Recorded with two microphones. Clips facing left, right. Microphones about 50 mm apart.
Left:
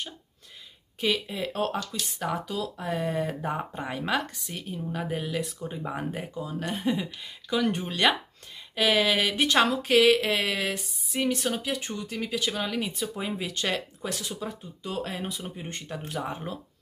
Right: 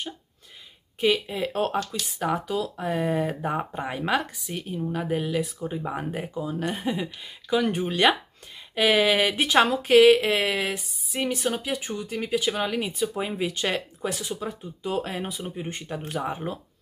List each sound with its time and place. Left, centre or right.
1.0 s speech: centre